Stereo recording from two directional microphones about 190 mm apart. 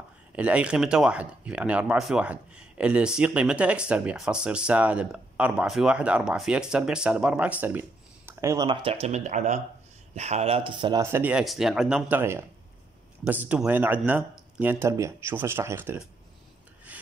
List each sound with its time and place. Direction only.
0.4 s speech: 5° right (ahead or behind)
8.8 s speech: 35° right (ahead or behind); by 16.0 s 10° right (ahead or behind)